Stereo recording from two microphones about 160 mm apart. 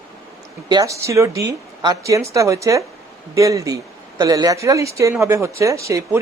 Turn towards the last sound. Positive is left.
turn(degrees=-20)  # may be behind; listen again after turning